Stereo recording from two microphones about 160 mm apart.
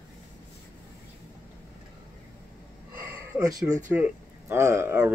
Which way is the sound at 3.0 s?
20° right (ahead or behind).